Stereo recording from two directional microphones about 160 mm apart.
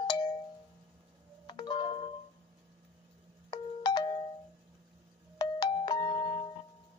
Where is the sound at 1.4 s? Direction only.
30° left (ahead or behind).